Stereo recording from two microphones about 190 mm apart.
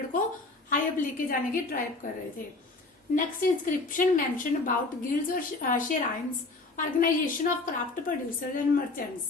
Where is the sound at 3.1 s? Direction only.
45° left (ahead or behind).